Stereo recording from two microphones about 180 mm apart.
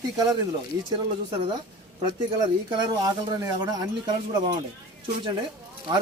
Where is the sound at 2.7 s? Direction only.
25° right (ahead or behind).